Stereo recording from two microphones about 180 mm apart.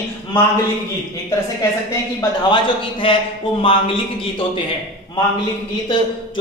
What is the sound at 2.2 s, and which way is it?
Speech, 25° left (ahead or behind).